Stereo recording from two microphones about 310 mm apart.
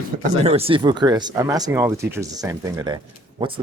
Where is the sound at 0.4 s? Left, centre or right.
Centre.